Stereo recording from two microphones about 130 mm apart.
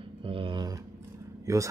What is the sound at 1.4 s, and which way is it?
Speech, 25° right (ahead or behind).